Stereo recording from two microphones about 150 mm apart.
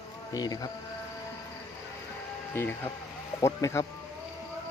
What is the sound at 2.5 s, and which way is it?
Speech, 15° left (ahead or behind).